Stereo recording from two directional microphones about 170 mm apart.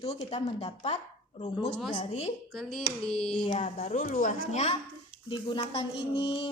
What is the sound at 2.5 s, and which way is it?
Hands, 5° left (ahead or behind).